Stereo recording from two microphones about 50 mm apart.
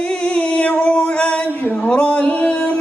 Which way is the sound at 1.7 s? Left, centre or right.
Left.